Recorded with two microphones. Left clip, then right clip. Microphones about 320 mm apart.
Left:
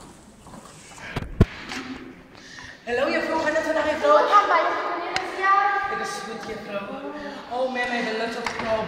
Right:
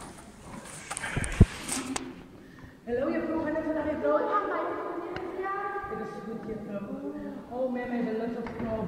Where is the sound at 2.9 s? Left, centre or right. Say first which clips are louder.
Left 7 dB; left.